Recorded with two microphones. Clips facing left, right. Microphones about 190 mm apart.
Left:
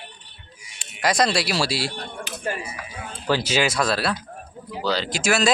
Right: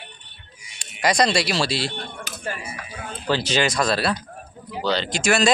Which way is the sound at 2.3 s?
40° right (ahead or behind).